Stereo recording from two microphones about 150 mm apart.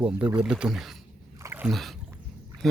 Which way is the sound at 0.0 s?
5° right (ahead or behind).